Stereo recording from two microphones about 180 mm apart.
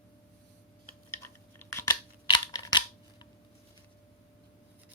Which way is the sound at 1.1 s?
15° left (ahead or behind).